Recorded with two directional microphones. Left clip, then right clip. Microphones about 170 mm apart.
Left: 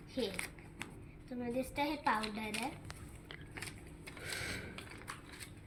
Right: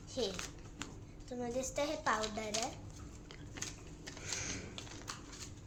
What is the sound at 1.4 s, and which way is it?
Speech, 30° right (ahead or behind).